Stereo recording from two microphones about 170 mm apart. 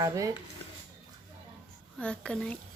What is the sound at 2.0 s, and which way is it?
Speech, 5° left (ahead or behind).